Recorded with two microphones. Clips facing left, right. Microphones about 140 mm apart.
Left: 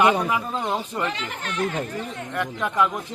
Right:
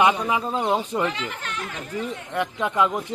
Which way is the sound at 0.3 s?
20° right (ahead or behind).